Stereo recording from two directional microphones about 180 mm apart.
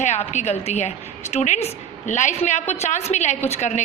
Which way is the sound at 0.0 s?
40° left (ahead or behind).